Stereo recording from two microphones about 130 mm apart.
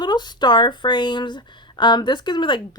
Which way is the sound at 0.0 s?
35° left (ahead or behind).